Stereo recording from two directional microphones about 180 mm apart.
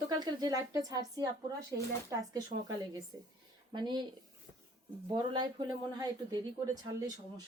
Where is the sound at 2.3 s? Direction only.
20° right (ahead or behind).